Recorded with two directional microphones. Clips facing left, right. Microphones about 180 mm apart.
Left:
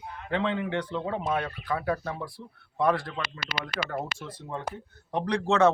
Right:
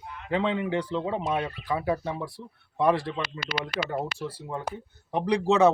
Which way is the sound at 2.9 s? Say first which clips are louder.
Right 3 dB; 30° right (ahead or behind).